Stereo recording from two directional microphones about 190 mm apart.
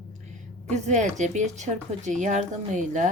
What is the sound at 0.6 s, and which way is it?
Speech, 35° right (ahead or behind).